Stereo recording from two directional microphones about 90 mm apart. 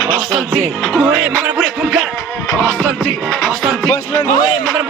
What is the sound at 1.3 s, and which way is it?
Music, 20° right (ahead or behind).